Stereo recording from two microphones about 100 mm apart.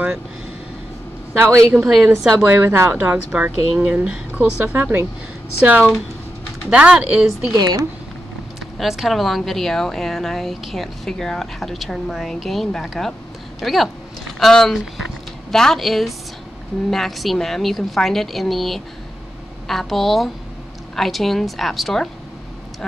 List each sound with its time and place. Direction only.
1.4 s a woman's voice: 30° right (ahead or behind)
1.7 s speech: 15° right (ahead or behind)
6.7 s speech: 10° right (ahead or behind)
7.5 s speech: 40° right (ahead or behind)
8.7 s speech: 5° right (ahead or behind)